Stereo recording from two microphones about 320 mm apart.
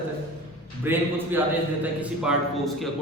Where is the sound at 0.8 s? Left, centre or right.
Centre.